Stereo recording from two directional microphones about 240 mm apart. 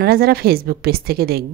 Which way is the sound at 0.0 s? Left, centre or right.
Right.